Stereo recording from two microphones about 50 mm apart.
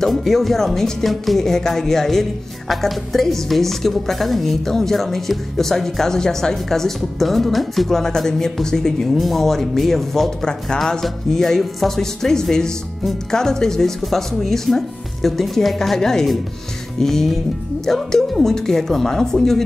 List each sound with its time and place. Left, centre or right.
0.0 s a woman's voice: centre